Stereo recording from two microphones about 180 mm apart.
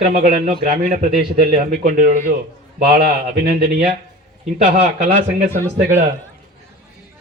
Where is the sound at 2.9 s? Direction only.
60° right (ahead or behind).